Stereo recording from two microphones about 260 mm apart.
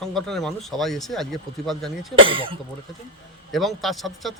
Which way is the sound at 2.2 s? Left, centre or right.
Centre.